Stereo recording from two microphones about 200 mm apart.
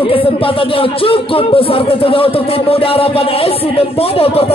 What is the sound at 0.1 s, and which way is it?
A man's voice, 25° left (ahead or behind).